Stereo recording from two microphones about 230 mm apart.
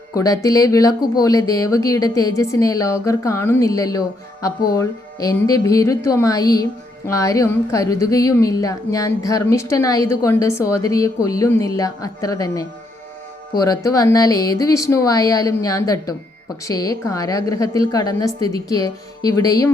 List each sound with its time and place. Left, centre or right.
0.1 s a woman's voice: centre